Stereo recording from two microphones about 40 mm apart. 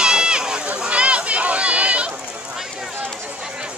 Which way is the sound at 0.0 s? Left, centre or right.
Right.